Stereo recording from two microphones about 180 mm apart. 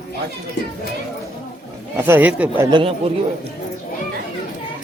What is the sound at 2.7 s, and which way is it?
Speech, 30° right (ahead or behind).